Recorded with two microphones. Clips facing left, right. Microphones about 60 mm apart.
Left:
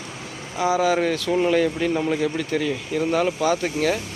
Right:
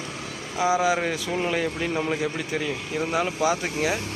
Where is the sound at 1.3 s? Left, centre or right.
Centre.